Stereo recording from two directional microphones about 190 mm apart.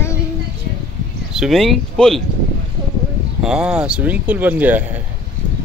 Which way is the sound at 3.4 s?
5° right (ahead or behind).